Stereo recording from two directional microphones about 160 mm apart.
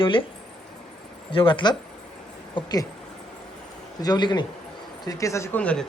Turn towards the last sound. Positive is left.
turn(degrees=5)  # may be behind; listen again after turning